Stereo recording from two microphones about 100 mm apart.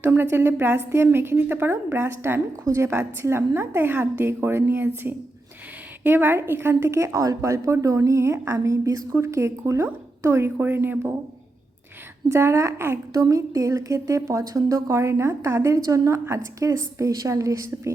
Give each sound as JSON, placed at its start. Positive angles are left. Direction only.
{"t": 0.0, "sound": "a woman's voice", "side_deg": -20}
{"t": 6.0, "sound": "a woman's voice", "side_deg": -20}
{"t": 12.3, "sound": "a woman's voice", "side_deg": -25}
{"t": 13.1, "sound": "a woman's voice", "side_deg": -35}